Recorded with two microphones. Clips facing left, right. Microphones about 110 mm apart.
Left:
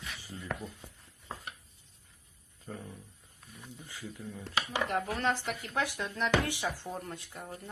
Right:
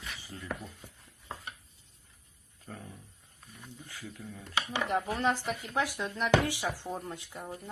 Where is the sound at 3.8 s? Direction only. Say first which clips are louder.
Left 1 dB; 20° left (ahead or behind).